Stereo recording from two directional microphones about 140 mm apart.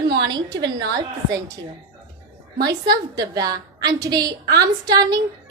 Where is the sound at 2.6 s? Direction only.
25° right (ahead or behind).